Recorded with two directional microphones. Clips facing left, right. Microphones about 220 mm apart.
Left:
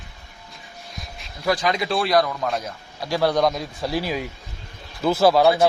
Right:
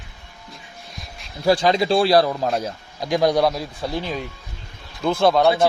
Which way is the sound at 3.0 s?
15° right (ahead or behind).